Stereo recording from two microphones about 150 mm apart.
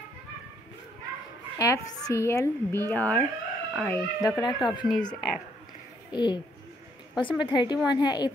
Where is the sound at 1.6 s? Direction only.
20° left (ahead or behind).